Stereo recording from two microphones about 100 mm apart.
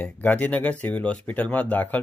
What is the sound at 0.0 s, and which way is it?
Speech, 15° left (ahead or behind).